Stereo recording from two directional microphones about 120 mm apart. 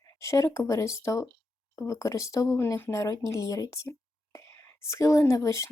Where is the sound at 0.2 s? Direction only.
25° left (ahead or behind).